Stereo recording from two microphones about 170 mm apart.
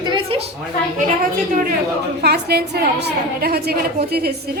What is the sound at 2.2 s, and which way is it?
A woman's voice, 70° right (ahead or behind).